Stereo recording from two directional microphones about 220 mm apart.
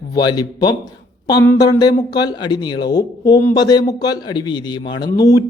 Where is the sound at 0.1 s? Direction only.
20° left (ahead or behind).